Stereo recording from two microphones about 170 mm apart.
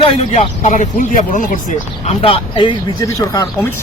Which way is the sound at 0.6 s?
50° left (ahead or behind).